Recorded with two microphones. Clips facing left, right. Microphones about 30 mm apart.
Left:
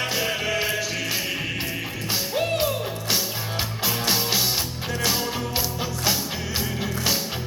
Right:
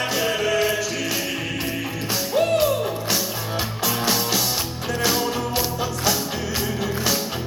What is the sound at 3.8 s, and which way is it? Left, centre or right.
Music, centre.